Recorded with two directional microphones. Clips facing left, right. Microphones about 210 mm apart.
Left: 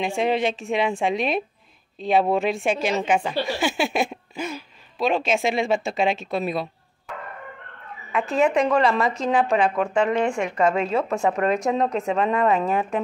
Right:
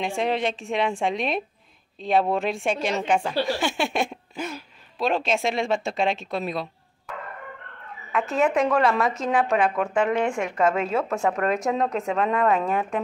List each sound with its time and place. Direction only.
0.0 s speech: centre (ahead or behind)
8.1 s speech: centre (ahead or behind)